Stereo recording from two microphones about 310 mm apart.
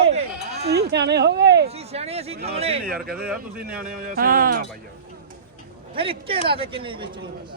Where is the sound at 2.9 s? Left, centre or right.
Centre.